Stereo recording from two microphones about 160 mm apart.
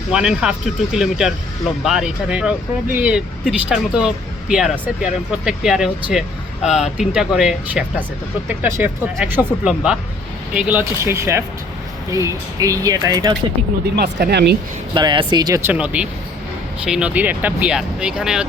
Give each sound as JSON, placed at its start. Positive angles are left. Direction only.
{"t": 0.1, "sound": "speech", "side_deg": -5}
{"t": 1.8, "sound": "speech", "side_deg": -5}
{"t": 13.9, "sound": "speech", "side_deg": -90}
{"t": 14.9, "sound": "speech", "side_deg": -30}
{"t": 15.7, "sound": "speech", "side_deg": -10}